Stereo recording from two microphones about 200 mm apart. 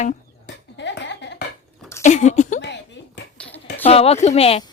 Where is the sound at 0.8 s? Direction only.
60° left (ahead or behind).